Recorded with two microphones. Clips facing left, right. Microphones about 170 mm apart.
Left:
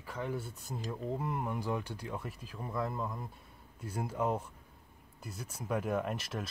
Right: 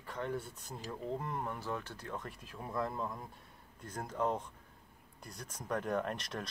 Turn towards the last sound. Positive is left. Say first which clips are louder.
# left 2 dB
turn(degrees=5)  # may be behind; listen again after turning